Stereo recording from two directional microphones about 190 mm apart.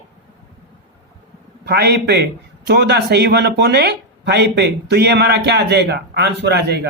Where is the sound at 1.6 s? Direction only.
60° right (ahead or behind).